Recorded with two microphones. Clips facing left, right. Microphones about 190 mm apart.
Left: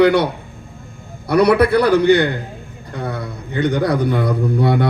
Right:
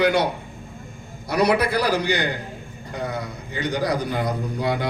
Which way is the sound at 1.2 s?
60° left (ahead or behind).